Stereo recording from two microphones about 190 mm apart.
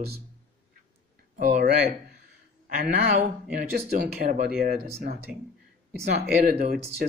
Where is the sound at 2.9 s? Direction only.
45° right (ahead or behind).